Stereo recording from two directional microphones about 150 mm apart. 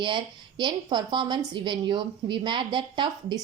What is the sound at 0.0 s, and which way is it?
A woman's voice, 30° right (ahead or behind).